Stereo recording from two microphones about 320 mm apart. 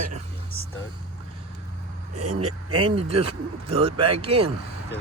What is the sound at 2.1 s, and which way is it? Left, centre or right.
Speech, right.